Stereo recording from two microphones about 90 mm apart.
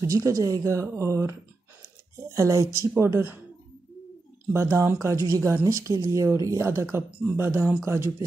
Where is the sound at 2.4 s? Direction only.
35° right (ahead or behind).